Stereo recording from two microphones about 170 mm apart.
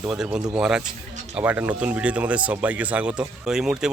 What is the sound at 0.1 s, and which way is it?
Speech, 5° right (ahead or behind).